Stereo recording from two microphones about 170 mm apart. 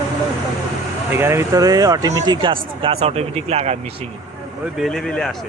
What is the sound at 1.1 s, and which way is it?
Speech, 15° right (ahead or behind).